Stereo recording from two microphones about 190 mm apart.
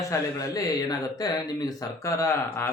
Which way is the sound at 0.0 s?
15° left (ahead or behind).